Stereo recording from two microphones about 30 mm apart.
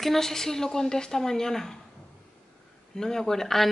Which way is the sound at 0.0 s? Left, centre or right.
Centre.